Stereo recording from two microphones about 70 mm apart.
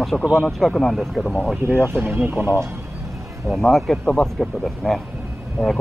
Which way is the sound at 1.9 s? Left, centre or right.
Right.